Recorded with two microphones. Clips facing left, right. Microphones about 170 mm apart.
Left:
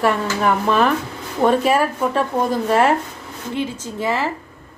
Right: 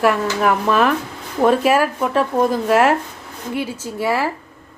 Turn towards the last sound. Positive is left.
turn(degrees=-10)  # may be behind; listen again after turning